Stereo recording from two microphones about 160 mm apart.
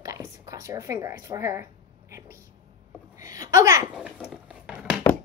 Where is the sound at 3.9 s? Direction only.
5° right (ahead or behind).